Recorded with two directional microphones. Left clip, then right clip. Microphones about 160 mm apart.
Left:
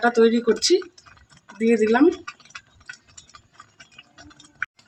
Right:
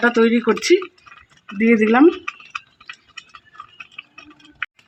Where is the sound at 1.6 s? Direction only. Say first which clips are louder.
Right 3 dB; 50° right (ahead or behind).